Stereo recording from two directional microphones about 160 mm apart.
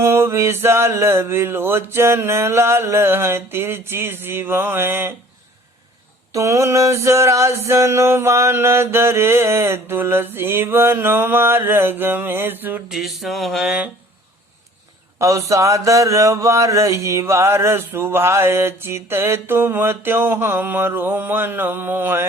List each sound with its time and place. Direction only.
0.0 s mantra: 15° right (ahead or behind)
6.3 s mantra: 20° right (ahead or behind)
12.9 s a sound: centre (ahead or behind)
15.2 s mantra: 20° right (ahead or behind)